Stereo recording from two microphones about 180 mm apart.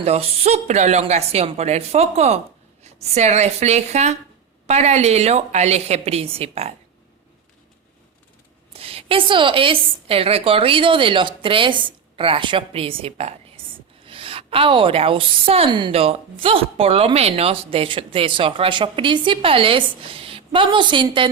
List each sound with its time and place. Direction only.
0.0 s a woman's voice: 35° right (ahead or behind)
8.7 s a woman's voice: 30° right (ahead or behind)